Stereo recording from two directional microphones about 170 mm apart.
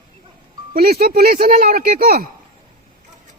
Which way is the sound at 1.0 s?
60° right (ahead or behind).